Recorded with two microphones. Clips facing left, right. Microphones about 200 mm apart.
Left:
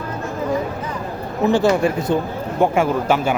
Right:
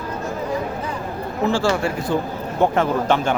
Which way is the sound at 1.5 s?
20° left (ahead or behind).